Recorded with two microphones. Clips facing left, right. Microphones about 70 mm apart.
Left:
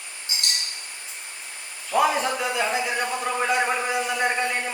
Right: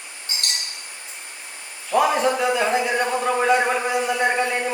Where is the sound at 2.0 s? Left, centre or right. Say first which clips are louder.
Right 3 dB; centre.